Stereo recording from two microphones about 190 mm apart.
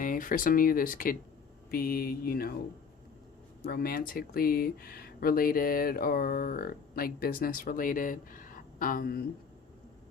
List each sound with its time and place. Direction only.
0.0 s speech: 45° left (ahead or behind)
3.6 s speech: 55° left (ahead or behind)